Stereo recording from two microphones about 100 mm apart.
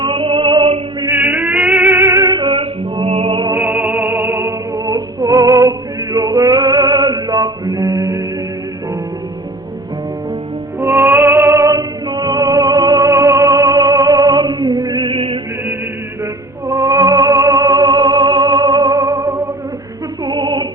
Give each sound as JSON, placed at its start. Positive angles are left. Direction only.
{"t": 0.0, "sound": "female singing", "side_deg": -55}
{"t": 1.1, "sound": "a sound", "side_deg": -15}
{"t": 1.7, "sound": "music", "side_deg": -20}
{"t": 2.3, "sound": "music", "side_deg": -55}
{"t": 3.7, "sound": "music", "side_deg": -15}
{"t": 4.9, "sound": "music", "side_deg": -40}
{"t": 6.1, "sound": "male singing", "side_deg": -40}
{"t": 10.8, "sound": "music", "side_deg": -25}
{"t": 16.6, "sound": "music", "side_deg": -35}
{"t": 20.2, "sound": "music", "side_deg": -50}